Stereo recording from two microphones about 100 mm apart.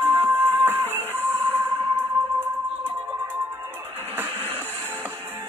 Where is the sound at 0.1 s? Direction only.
20° right (ahead or behind).